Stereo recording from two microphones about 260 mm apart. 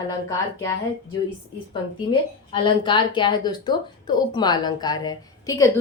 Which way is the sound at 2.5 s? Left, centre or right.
Centre.